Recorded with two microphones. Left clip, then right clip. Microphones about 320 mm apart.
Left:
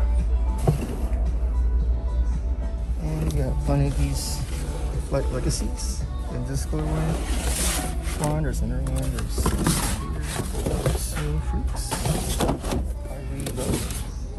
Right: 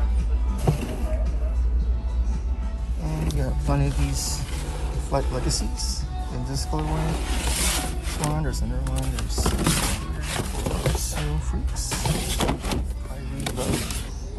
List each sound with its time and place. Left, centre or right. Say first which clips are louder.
0.7 s music: even; centre
3.2 s a sound: left 1 dB; centre
4.1 s speech: right 2 dB; left
4.6 s music: even; centre
6.5 s speech: right 2 dB; centre
12.0 s a sound: right 1 dB; centre
13.4 s speech: right 2 dB; centre